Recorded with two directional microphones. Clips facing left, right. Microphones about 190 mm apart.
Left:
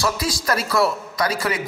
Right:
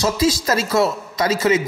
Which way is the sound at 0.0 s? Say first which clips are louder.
Right 5 dB; 25° right (ahead or behind).